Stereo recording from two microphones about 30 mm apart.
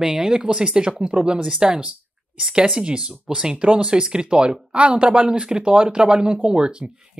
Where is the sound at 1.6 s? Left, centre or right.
Right.